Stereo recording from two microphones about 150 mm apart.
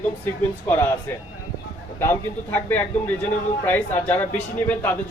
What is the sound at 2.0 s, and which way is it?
Speech, 15° left (ahead or behind).